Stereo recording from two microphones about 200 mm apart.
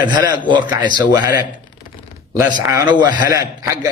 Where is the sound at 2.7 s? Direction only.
15° right (ahead or behind).